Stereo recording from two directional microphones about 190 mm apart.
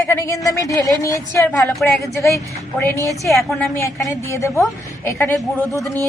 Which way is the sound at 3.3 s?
Centre (ahead or behind).